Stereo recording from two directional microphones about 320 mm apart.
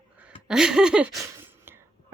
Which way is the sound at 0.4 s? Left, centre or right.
Centre.